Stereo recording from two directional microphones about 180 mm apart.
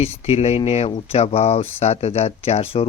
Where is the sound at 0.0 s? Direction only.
35° left (ahead or behind).